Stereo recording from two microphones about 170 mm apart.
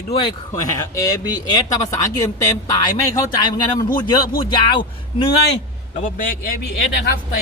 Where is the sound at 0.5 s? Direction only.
20° left (ahead or behind).